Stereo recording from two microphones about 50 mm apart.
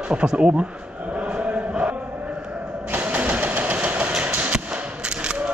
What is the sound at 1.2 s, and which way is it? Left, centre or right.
Chant, right.